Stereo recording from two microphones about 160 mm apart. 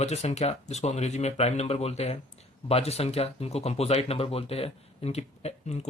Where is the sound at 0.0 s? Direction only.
45° left (ahead or behind).